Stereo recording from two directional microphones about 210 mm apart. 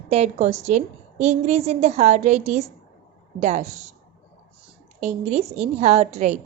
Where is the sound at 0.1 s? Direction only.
30° right (ahead or behind).